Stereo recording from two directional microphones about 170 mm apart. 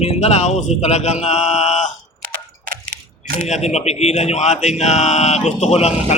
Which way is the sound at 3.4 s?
40° left (ahead or behind).